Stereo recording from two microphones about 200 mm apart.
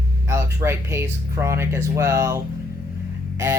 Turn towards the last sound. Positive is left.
turn(degrees=-15)  # may be behind; listen again after turning